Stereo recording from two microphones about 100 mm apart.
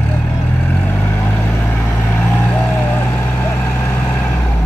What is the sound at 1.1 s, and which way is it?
Vehicle, 25° left (ahead or behind).